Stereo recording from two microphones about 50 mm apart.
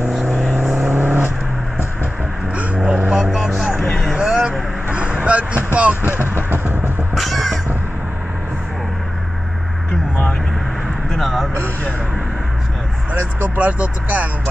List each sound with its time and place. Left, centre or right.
0.0 s vehicle: right
2.5 s vehicle: right
3.1 s vehicle: centre; by 5.9 s right
6.0 s vehicle: right
7.2 s music: centre
11.1 s a sound: centre
13.1 s vehicle: right